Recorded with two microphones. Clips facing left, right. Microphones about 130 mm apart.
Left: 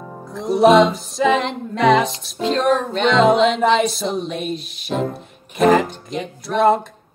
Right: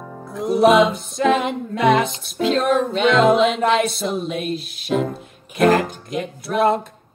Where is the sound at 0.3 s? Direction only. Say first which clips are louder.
Left 2 dB; centre (ahead or behind).